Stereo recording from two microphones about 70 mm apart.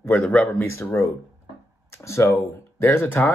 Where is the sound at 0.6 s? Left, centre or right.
Left.